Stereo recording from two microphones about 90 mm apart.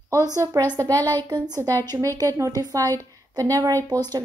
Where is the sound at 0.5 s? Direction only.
40° right (ahead or behind).